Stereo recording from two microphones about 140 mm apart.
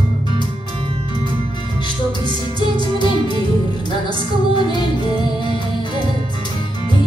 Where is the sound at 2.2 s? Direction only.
35° right (ahead or behind).